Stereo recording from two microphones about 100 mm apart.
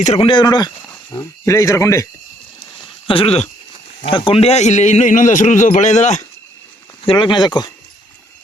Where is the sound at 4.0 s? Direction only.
60° left (ahead or behind); by 4.6 s 80° left.